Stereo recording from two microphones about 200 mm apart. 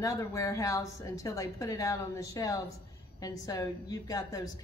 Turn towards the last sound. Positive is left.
turn(degrees=15)  # may be behind; listen again after turning